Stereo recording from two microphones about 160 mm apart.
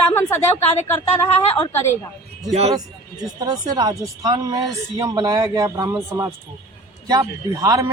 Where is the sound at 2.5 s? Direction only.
40° right (ahead or behind).